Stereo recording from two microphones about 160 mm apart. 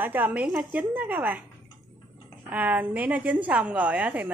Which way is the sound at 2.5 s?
10° right (ahead or behind).